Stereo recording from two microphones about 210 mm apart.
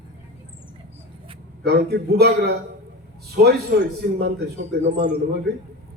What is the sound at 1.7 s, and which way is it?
Speech, 50° right (ahead or behind).